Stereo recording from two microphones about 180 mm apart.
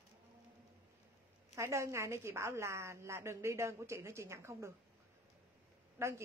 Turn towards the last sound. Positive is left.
turn(degrees=-15)  # may be behind; listen again after turning